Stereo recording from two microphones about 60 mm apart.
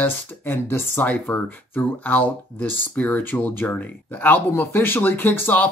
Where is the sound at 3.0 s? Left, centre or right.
Left.